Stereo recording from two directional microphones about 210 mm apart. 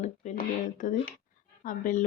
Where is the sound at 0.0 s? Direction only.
35° left (ahead or behind).